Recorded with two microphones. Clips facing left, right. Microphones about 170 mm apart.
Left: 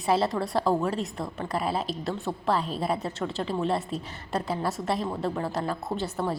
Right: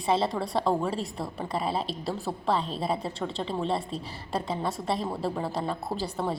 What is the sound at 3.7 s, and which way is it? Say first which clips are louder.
Speech: left 1 dB; 30° right (ahead or behind).